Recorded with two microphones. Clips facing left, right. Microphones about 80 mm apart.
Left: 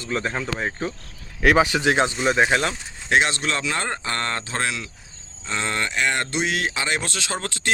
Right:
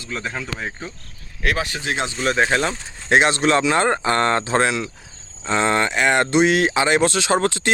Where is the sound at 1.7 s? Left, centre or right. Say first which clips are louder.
Left 8 dB; left.